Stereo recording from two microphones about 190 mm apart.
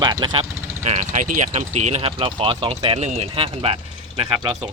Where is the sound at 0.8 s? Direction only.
40° right (ahead or behind).